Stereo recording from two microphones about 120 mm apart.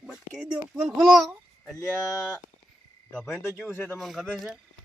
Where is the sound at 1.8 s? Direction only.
25° left (ahead or behind).